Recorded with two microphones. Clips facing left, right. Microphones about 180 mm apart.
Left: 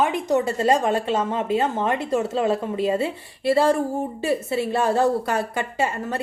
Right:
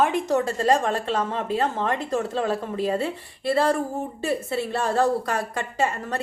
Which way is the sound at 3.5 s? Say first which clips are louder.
Left 3 dB; 25° left (ahead or behind).